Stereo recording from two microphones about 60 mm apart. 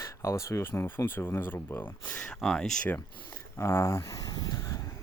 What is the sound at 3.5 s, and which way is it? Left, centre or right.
Speech, left.